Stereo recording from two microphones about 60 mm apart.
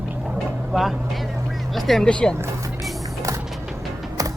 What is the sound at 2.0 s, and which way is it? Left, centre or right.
Speech, centre.